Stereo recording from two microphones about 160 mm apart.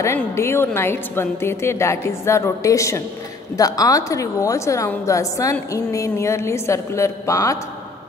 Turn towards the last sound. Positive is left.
turn(degrees=20)  # may be behind; listen again after turning